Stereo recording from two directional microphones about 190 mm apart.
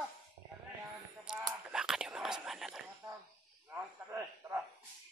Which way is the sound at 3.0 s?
20° right (ahead or behind).